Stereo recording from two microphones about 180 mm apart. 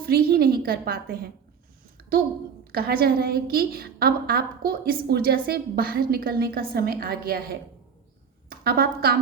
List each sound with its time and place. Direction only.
0.0 s a woman's voice: 60° right (ahead or behind)
2.7 s a woman's voice: 60° right (ahead or behind)